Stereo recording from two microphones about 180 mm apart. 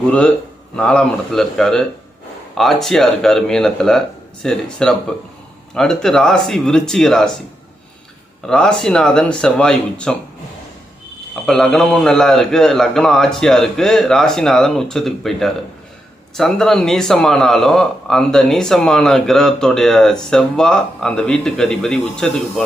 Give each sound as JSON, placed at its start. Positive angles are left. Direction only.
{"t": 0.1, "sound": "a man's voice", "side_deg": 5}
{"t": 8.4, "sound": "a man's voice", "side_deg": 5}
{"t": 11.4, "sound": "a man's voice", "side_deg": 5}